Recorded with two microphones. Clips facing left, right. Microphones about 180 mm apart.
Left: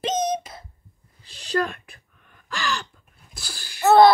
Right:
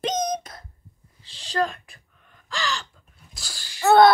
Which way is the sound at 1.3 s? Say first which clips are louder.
Left 1 dB; 60° left (ahead or behind).